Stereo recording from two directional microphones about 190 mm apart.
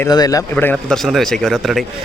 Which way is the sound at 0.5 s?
10° left (ahead or behind).